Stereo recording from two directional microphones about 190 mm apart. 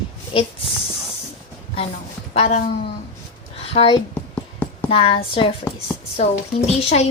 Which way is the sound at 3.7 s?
30° left (ahead or behind).